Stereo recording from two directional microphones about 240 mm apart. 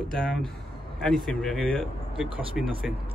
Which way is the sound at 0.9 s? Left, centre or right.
Centre.